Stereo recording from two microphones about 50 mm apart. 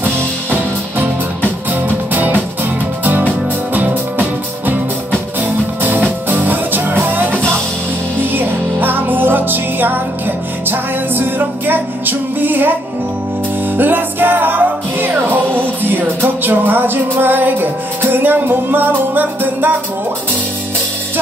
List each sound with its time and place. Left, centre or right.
0.0 s music: right
3.7 s music: right
5.8 s music: right
13.7 s music: right